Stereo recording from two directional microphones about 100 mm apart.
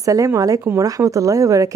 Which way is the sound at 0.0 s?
35° right (ahead or behind).